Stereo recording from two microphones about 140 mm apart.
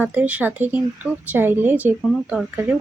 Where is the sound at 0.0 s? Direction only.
10° right (ahead or behind).